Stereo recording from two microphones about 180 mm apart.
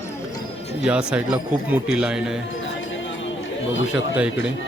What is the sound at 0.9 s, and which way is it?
Speech, 5° right (ahead or behind).